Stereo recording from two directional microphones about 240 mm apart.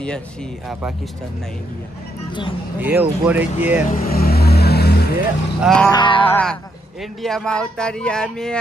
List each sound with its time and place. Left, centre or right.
2.8 s speech: centre
3.9 s vehicle: left
5.6 s speech: centre
5.9 s a sound: centre
6.3 s speech: centre